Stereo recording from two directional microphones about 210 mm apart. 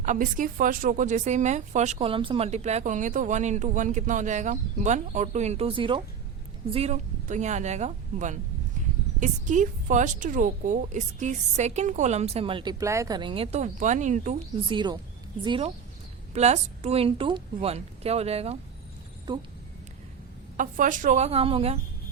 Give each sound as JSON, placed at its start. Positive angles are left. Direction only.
{"t": 0.0, "sound": "speech", "side_deg": -35}
{"t": 14.7, "sound": "speech", "side_deg": -20}
{"t": 20.6, "sound": "speech", "side_deg": -40}